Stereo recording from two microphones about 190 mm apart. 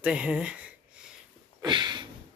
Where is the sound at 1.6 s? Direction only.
25° right (ahead or behind).